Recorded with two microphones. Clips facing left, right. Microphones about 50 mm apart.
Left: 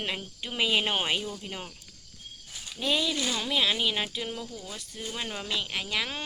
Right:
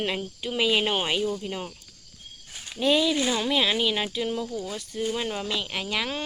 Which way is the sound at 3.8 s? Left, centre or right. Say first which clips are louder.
Right 4 dB; centre.